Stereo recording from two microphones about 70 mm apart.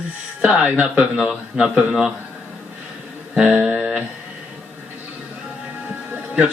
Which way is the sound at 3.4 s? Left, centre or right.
Right.